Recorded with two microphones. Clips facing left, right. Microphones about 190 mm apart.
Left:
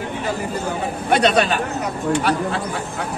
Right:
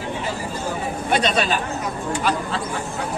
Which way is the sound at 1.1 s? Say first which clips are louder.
Left 4 dB; 60° left (ahead or behind).